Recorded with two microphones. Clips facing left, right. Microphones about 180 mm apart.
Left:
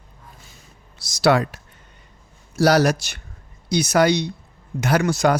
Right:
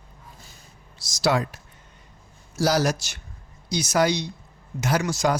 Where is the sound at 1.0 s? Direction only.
65° left (ahead or behind).